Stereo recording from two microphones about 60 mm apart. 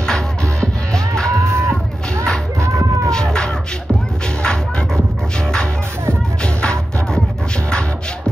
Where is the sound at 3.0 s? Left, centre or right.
Centre.